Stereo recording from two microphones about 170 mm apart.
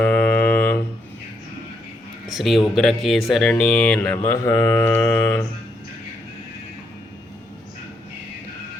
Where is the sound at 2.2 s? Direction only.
Centre (ahead or behind).